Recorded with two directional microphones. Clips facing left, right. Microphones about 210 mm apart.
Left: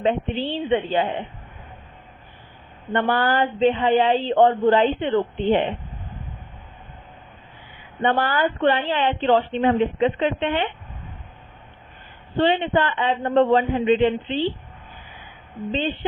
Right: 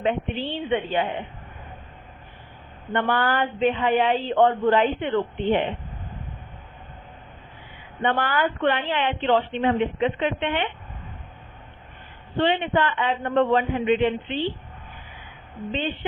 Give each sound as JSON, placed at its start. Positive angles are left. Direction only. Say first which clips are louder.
{"t": 0.0, "sound": "speech", "louder": "left 3 dB", "side_deg": 30}
{"t": 2.9, "sound": "speech", "louder": "left 2 dB", "side_deg": 35}
{"t": 8.0, "sound": "speech", "louder": "left 2 dB", "side_deg": 35}
{"t": 12.4, "sound": "speech", "louder": "left 2 dB", "side_deg": 30}